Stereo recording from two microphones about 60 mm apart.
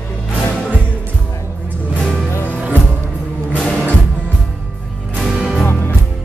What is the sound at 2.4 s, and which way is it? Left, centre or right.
Music, right.